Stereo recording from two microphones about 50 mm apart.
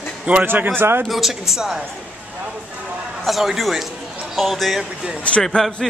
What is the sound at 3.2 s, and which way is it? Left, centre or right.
Speech, centre.